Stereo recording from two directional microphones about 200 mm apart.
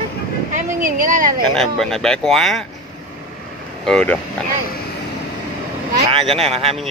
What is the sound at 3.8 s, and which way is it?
Speech, 5° left (ahead or behind).